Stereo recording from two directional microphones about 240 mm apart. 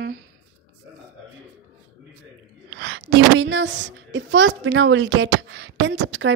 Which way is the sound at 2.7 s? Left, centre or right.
Right.